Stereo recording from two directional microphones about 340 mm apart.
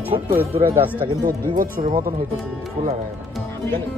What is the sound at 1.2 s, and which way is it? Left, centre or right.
Speech, right.